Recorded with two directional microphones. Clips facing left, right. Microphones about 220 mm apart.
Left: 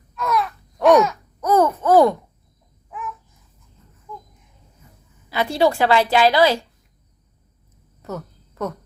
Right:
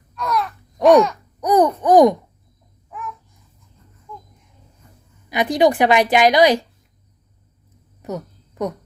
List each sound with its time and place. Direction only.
0.1 s wail: centre (ahead or behind)
1.4 s babbling: 15° right (ahead or behind)
2.9 s babbling: centre (ahead or behind)
5.3 s a woman's voice: 15° right (ahead or behind)
8.0 s a sound: 15° right (ahead or behind)